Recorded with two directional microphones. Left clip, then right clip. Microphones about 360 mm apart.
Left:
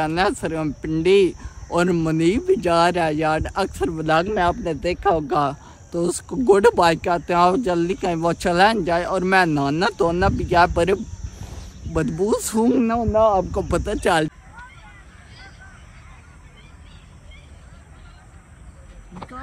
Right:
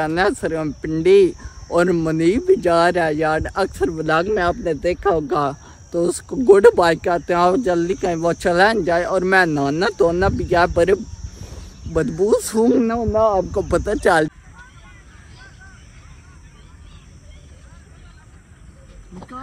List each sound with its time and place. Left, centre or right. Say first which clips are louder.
0.0 s speech: right 2 dB; centre
11.1 s a sound: right 1 dB; centre
11.9 s speech: right 4 dB; centre
12.3 s speech: right 5 dB; centre